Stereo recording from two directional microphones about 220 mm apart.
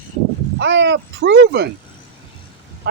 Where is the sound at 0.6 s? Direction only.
55° right (ahead or behind).